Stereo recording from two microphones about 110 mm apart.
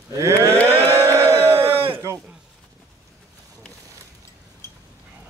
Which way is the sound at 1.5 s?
60° right (ahead or behind).